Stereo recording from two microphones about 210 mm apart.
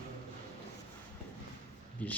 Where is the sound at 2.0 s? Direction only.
5° left (ahead or behind).